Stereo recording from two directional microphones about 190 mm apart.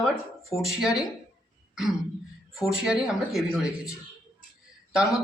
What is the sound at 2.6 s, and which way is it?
A man's voice, 5° right (ahead or behind).